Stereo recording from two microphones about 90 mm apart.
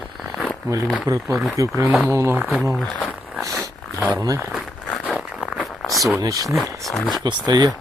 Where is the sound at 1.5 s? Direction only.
35° right (ahead or behind).